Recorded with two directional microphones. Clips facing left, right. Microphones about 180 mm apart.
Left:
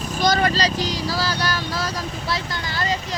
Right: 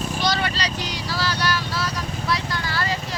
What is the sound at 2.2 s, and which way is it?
Vehicle, 25° left (ahead or behind).